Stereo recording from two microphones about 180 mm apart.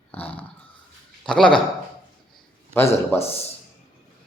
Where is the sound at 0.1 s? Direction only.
10° left (ahead or behind).